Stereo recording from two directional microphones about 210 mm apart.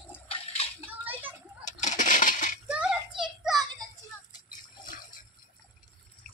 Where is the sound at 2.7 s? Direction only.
5° right (ahead or behind).